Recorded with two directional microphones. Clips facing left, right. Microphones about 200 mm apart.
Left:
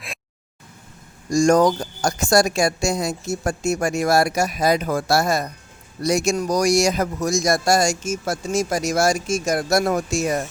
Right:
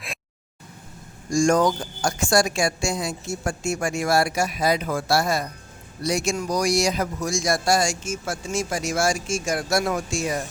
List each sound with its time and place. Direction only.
1.3 s a man's voice: 40° left (ahead or behind)